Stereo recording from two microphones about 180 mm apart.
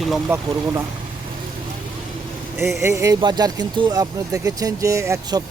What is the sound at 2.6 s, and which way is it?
A man's voice, 15° right (ahead or behind).